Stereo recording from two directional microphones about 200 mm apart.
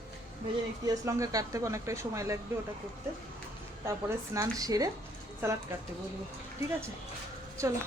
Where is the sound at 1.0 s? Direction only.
15° right (ahead or behind).